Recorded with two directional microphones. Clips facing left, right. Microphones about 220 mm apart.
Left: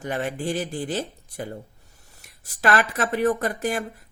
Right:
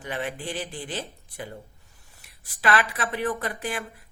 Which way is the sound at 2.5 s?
45° left (ahead or behind).